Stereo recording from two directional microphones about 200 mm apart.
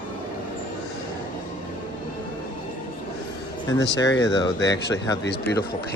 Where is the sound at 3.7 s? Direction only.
15° left (ahead or behind).